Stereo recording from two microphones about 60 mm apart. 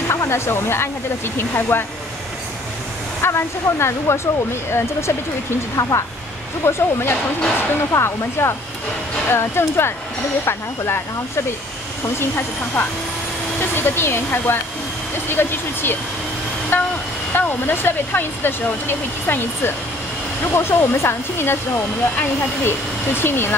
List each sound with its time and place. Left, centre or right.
0.1 s speech: left
3.2 s speech: left
5.8 s speech: left
6.6 s speech: left